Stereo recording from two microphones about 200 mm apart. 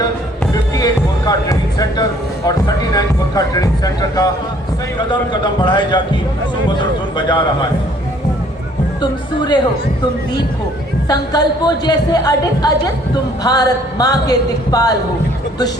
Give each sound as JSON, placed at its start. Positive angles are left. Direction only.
{"t": 0.5, "sound": "music", "side_deg": 20}
{"t": 2.5, "sound": "a man's voice", "side_deg": 20}
{"t": 9.0, "sound": "speech", "side_deg": 20}
{"t": 11.1, "sound": "speech", "side_deg": 20}